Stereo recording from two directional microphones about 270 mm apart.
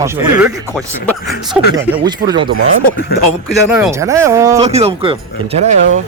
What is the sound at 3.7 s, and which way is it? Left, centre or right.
Speech, centre.